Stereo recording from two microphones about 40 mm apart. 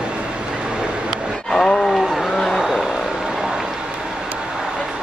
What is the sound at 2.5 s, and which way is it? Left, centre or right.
Vehicle, centre.